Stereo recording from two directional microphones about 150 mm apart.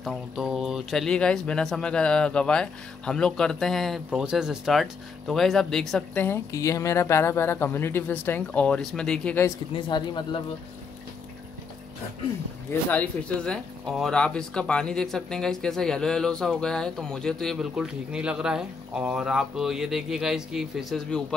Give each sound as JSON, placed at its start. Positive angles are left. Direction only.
{"t": 0.0, "sound": "speech", "side_deg": -5}
{"t": 9.8, "sound": "speech", "side_deg": 30}
{"t": 12.9, "sound": "speech", "side_deg": 10}